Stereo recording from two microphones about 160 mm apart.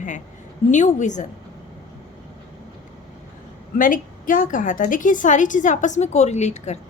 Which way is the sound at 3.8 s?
55° left (ahead or behind).